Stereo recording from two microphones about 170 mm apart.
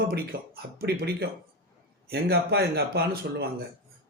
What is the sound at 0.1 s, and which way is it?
A man's voice, 65° right (ahead or behind).